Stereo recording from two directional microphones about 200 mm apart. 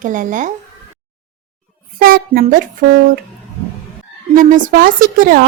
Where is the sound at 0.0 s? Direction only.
40° right (ahead or behind).